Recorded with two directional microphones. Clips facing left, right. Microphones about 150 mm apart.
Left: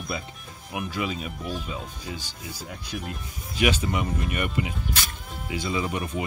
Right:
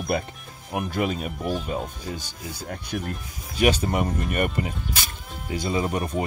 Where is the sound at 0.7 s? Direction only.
45° right (ahead or behind).